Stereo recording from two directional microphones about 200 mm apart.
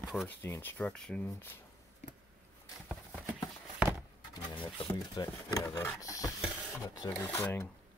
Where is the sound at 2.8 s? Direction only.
5° right (ahead or behind).